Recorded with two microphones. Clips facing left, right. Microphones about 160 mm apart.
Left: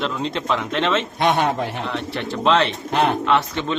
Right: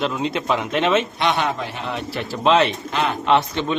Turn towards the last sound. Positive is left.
turn(degrees=-15)  # may be behind; listen again after turning